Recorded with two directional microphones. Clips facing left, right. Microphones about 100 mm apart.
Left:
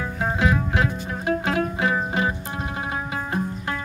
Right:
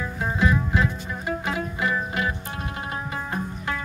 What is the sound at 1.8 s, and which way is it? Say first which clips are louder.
Music: left 3 dB; 25° left (ahead or behind).